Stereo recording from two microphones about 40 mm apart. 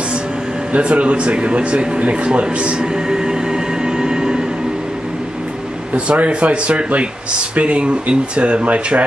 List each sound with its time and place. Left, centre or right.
0.7 s speech: right
3.1 s train: centre
5.9 s speech: right